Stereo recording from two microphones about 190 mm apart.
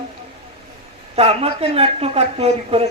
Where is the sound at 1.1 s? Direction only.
30° right (ahead or behind).